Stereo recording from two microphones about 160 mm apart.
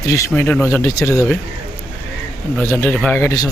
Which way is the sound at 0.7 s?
20° left (ahead or behind).